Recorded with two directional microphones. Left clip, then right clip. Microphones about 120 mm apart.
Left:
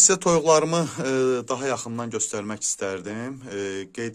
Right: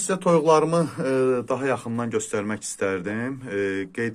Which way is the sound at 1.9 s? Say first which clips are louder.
Right 3 dB; 20° left (ahead or behind).